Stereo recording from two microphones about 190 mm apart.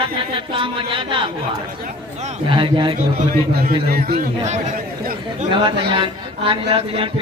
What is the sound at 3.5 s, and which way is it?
Speech, 55° right (ahead or behind).